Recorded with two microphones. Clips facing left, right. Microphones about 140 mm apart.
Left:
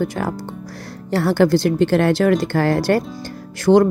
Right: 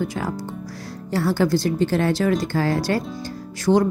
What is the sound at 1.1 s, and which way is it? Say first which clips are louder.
A woman's voice: left 4 dB; 65° left (ahead or behind).